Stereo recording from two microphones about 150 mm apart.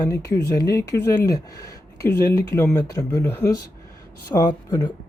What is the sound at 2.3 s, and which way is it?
Speech, 15° left (ahead or behind).